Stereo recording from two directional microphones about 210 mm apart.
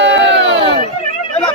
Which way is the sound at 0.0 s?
55° right (ahead or behind).